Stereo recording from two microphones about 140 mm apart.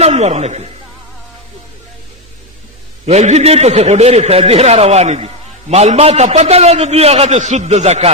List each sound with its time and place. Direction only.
0.0 s a man's voice: 50° right (ahead or behind)
3.1 s a man's voice: 50° right (ahead or behind)